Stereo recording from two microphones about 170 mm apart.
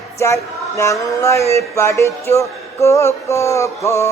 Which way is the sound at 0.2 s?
15° left (ahead or behind).